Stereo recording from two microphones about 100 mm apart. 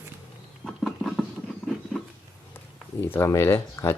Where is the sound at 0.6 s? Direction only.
Centre (ahead or behind).